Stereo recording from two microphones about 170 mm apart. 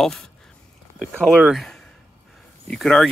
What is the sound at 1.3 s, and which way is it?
Speech, 5° right (ahead or behind).